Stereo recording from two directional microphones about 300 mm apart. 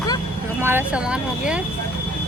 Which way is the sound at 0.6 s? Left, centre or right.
Centre.